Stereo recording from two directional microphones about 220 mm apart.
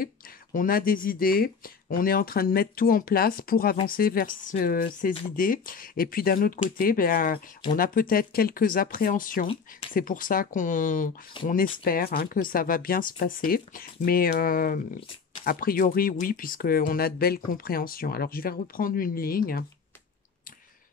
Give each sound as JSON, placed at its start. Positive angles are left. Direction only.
{"t": 0.0, "sound": "speech", "side_deg": 40}